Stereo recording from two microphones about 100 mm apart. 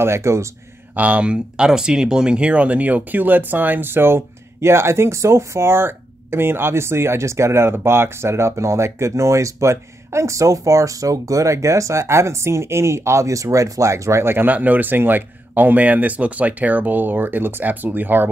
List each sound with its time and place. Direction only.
0.0 s speech: 30° right (ahead or behind)
0.9 s speech: 15° right (ahead or behind)